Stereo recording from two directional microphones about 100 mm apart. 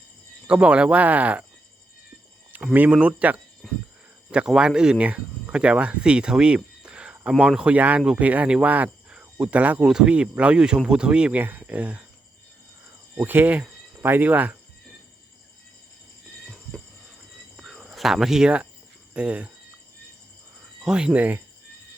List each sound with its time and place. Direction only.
0.4 s speech: 10° right (ahead or behind)
2.7 s speech: 15° right (ahead or behind)
3.6 s a sound: 5° left (ahead or behind)
4.3 s speech: 10° right (ahead or behind)
13.1 s speech: 20° right (ahead or behind)
17.6 s a sound: centre (ahead or behind)
19.1 s speech: 15° right (ahead or behind)
20.8 s speech: 10° right (ahead or behind)